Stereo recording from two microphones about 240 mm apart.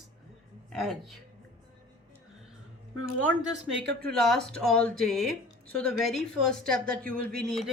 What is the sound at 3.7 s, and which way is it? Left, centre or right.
Speech, right.